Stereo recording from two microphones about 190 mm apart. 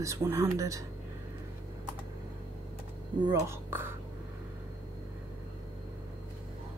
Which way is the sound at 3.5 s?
10° right (ahead or behind).